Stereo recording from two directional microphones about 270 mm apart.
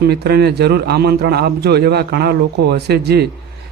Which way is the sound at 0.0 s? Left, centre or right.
Right.